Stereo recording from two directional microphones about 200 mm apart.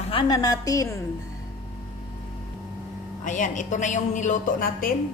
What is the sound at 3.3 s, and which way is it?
A woman's voice, 40° left (ahead or behind).